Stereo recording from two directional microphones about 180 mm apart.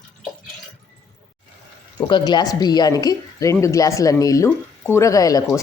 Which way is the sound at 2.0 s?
25° left (ahead or behind).